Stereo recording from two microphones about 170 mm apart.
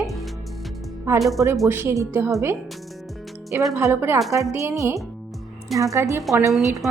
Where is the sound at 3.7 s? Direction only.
15° right (ahead or behind).